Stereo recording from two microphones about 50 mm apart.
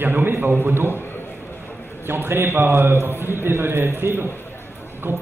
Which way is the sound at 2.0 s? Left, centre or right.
Right.